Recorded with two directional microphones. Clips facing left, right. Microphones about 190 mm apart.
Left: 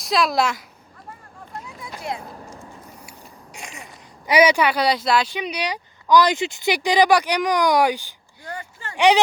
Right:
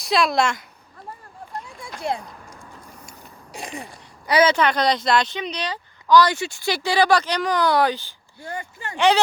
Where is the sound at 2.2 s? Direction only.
30° left (ahead or behind).